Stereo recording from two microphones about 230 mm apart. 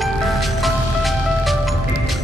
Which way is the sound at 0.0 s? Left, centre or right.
Centre.